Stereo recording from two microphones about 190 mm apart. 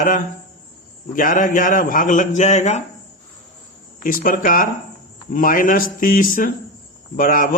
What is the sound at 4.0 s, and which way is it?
A man's voice, 45° left (ahead or behind).